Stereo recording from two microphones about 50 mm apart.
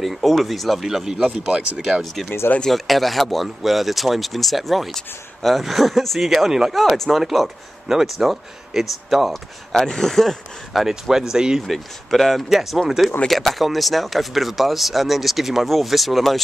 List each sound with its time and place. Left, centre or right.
0.0 s speech: centre
1.3 s speech: centre
1.9 s speech: centre
11.6 s speech: centre